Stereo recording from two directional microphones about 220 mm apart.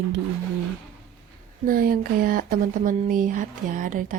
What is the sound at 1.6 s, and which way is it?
Speech, 40° right (ahead or behind).